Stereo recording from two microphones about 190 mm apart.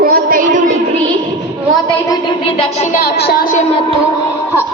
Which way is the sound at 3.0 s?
50° left (ahead or behind).